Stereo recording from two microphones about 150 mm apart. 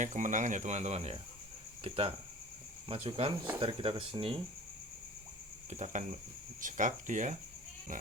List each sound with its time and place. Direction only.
0.0 s speech: 55° right (ahead or behind); by 4.4 s 35° right (ahead or behind)
5.7 s speech: 50° right (ahead or behind)